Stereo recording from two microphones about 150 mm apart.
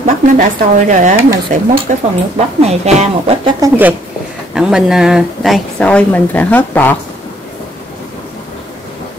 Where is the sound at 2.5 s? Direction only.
45° right (ahead or behind).